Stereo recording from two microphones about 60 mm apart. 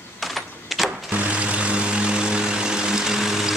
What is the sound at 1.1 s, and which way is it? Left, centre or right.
Vehicle, right.